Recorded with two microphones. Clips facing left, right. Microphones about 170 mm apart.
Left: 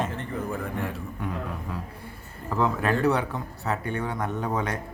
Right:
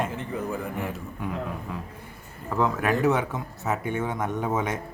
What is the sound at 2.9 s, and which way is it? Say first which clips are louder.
Speech: right 1 dB; 20° right (ahead or behind).